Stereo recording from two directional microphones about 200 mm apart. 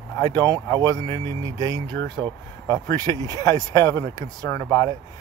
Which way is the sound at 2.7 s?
15° left (ahead or behind).